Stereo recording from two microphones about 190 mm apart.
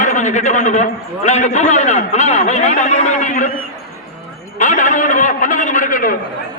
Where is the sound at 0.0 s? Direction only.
40° left (ahead or behind).